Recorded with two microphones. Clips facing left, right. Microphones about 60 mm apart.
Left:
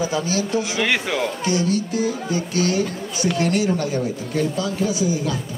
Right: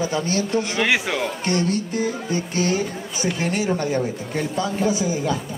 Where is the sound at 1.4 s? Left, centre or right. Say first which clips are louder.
Left 1 dB; right.